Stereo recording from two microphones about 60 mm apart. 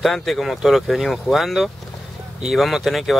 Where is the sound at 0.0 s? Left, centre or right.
Centre.